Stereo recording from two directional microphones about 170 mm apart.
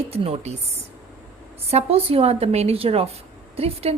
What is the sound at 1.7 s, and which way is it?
Speech, 35° right (ahead or behind).